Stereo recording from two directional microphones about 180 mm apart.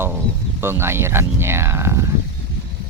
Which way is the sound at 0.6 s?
15° right (ahead or behind).